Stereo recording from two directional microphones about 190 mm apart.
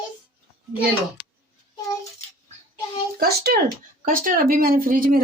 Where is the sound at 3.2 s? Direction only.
55° right (ahead or behind).